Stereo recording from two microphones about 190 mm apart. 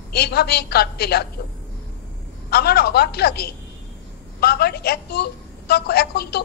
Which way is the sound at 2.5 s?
55° left (ahead or behind).